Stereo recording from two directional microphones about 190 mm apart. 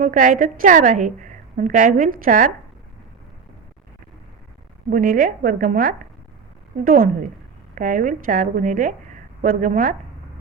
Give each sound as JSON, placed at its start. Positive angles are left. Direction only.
{"t": 0.0, "sound": "a woman's voice", "side_deg": -40}
{"t": 4.9, "sound": "a woman's voice", "side_deg": -45}